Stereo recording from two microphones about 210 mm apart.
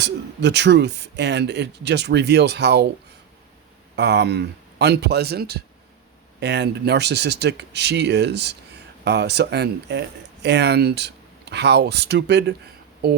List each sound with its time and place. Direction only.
0.0 s speech: 55° right (ahead or behind)
3.9 s speech: 55° right (ahead or behind)